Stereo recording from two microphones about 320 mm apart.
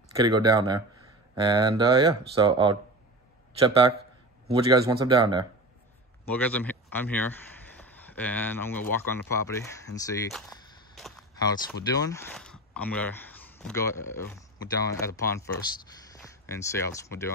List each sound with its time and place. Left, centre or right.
0.1 s speech: centre
6.3 s speech: centre
11.0 s a sound: centre
11.9 s speech: centre